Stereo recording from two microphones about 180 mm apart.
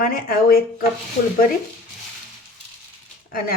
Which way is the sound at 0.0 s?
50° left (ahead or behind).